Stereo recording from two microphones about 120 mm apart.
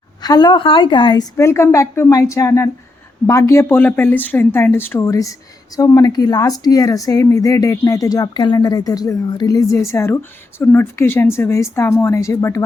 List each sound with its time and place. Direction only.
0.2 s a woman's voice: 35° left (ahead or behind)
1.4 s speech: 20° left (ahead or behind)